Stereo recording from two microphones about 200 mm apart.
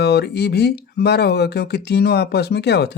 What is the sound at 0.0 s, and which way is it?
Speech, 55° left (ahead or behind).